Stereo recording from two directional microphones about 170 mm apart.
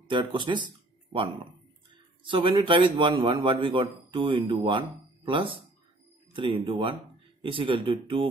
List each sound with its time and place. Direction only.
0.1 s a man's voice: 30° right (ahead or behind)